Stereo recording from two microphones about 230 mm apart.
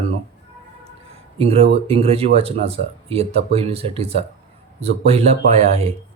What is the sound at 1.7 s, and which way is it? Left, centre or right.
Speech, right.